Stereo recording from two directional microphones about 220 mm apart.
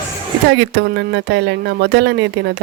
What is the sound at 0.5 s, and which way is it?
Speech, 55° right (ahead or behind).